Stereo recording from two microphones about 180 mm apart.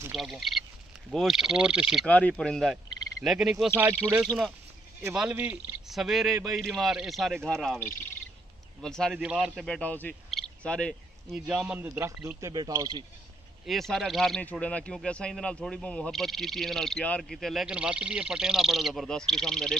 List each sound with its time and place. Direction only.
0.1 s a man's voice: centre (ahead or behind)
2.0 s a man's voice: 5° left (ahead or behind); by 3.9 s 10° right (ahead or behind)
5.1 s a man's voice: 5° right (ahead or behind)
8.8 s a man's voice: 5° left (ahead or behind); by 13.0 s 20° right (ahead or behind)
13.7 s a man's voice: centre (ahead or behind)